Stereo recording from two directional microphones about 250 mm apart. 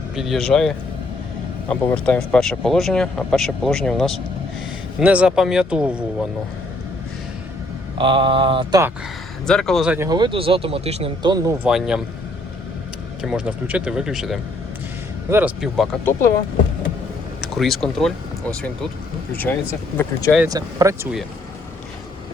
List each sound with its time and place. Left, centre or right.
0.2 s speech: centre
7.9 s mantra: centre
9.5 s speech: centre
11.7 s speech: centre
13.2 s speech: centre
17.4 s speech: centre
20.5 s speech: centre